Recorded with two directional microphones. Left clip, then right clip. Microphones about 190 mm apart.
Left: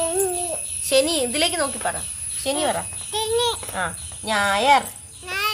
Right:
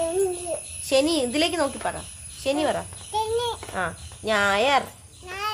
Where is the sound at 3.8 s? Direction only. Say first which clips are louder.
Left 2 dB; 20° right (ahead or behind).